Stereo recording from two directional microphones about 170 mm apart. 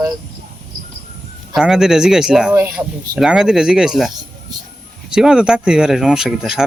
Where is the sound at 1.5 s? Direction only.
5° right (ahead or behind).